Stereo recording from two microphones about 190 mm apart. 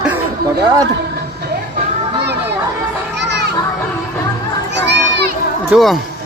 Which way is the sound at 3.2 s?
60° right (ahead or behind).